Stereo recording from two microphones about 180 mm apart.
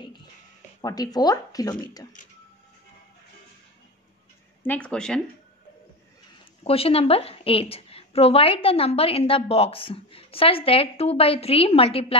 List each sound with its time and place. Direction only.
0.7 s speech: 20° left (ahead or behind)
4.6 s speech: 5° left (ahead or behind)
6.6 s a woman's voice: 35° left (ahead or behind)